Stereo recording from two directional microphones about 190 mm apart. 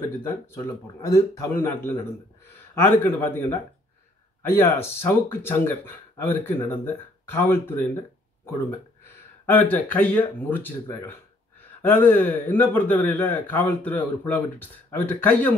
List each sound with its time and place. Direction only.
0.2 s speech: 10° left (ahead or behind)
9.0 s speech: 10° left (ahead or behind)